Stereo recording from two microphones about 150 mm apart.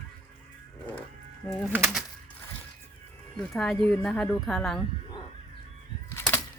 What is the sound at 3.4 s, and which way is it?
Speech, 5° left (ahead or behind).